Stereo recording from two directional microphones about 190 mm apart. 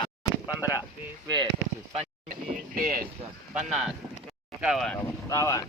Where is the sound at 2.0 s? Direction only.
45° right (ahead or behind).